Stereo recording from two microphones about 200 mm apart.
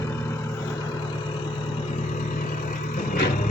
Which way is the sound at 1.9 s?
40° left (ahead or behind).